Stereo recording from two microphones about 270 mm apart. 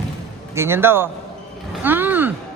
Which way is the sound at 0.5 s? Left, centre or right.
Centre.